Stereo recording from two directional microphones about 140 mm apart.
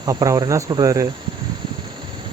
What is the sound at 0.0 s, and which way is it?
Speech, 25° right (ahead or behind).